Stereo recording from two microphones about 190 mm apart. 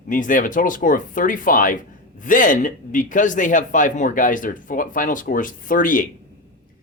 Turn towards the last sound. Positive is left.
turn(degrees=45)  # may be behind; listen again after turning